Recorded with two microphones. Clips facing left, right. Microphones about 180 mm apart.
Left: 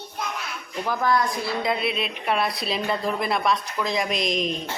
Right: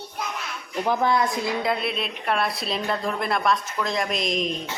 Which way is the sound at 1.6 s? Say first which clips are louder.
Even; centre (ahead or behind).